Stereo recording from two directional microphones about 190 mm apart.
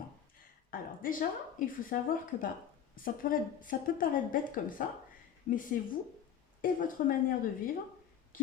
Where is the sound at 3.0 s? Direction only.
45° left (ahead or behind).